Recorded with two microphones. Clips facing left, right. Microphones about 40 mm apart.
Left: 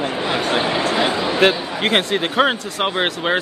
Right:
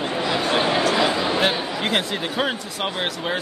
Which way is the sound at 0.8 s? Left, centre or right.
Left.